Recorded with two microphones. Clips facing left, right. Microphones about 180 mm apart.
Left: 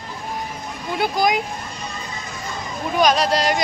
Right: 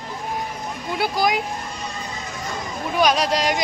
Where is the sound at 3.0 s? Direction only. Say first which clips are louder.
Left 2 dB; 10° right (ahead or behind).